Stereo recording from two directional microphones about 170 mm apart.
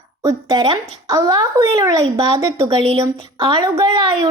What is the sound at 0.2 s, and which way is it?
A woman's voice, 20° right (ahead or behind).